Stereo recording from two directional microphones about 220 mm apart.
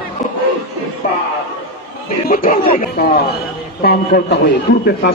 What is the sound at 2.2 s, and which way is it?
A man's voice, 40° left (ahead or behind).